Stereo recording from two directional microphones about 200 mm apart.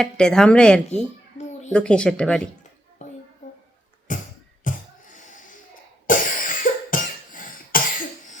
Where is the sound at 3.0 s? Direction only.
35° left (ahead or behind).